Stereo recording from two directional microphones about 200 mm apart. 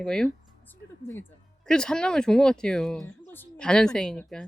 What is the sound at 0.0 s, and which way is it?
Speech, 5° left (ahead or behind).